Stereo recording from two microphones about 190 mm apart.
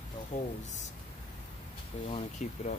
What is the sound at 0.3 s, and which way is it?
Speech, 40° left (ahead or behind).